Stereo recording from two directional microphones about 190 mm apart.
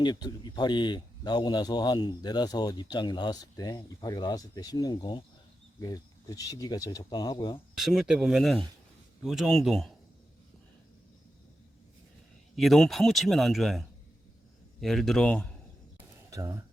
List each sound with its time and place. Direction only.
0.0 s speech: 20° left (ahead or behind)
7.8 s speech: centre (ahead or behind)
12.5 s speech: centre (ahead or behind)
16.3 s speech: 15° right (ahead or behind)